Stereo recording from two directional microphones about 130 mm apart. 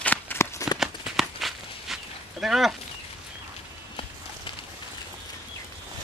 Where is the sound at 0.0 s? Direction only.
15° left (ahead or behind).